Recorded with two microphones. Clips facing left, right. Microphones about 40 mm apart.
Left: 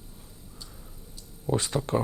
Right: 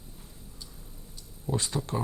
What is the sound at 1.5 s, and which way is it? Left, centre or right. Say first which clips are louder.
Speech: left 4 dB; left.